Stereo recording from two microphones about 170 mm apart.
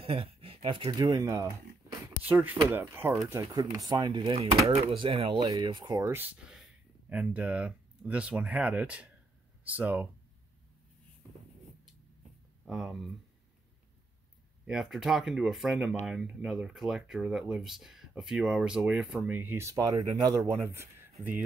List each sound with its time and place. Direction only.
0.0 s speech: 35° right (ahead or behind); by 10.0 s 10° right (ahead or behind)
12.6 s speech: 5° right (ahead or behind)
14.7 s speech: 5° right (ahead or behind)